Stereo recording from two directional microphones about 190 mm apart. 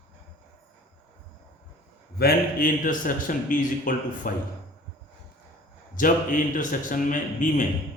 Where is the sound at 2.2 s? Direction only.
50° left (ahead or behind).